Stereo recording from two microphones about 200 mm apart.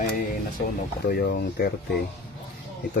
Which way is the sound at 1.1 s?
50° left (ahead or behind).